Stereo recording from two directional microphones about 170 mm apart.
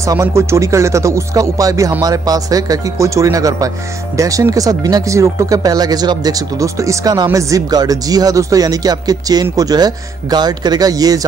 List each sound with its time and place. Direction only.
0.0 s speech: 20° right (ahead or behind)